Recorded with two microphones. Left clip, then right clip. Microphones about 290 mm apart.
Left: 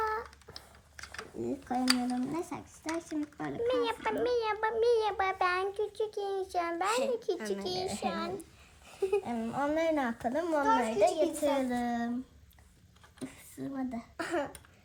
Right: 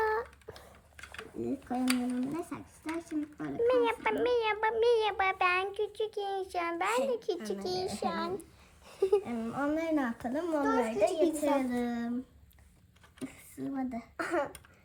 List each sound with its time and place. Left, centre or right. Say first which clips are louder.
0.0 s a sound: right 3 dB; centre
0.9 s a sound: left 2 dB; centre
1.6 s speech: left 3 dB; centre
7.6 s a child's voice: even; centre
9.2 s speech: left 1 dB; centre
13.1 s a child's voice: right 1 dB; centre